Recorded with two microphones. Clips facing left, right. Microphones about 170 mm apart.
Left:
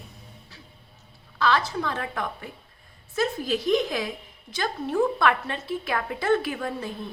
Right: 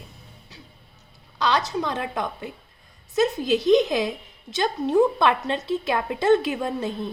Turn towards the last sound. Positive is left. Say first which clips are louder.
# right 4 dB
turn(degrees=-25)  # may be behind; listen again after turning